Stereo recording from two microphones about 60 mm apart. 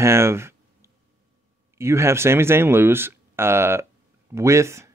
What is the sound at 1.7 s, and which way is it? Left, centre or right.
Speech, right.